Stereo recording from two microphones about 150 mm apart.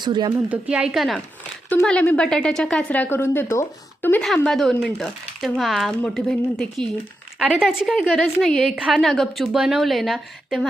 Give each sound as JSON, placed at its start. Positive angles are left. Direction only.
{"t": 0.0, "sound": "speech", "side_deg": -30}
{"t": 0.3, "sound": "a woman's voice", "side_deg": -10}
{"t": 4.2, "sound": "a woman's voice", "side_deg": 0}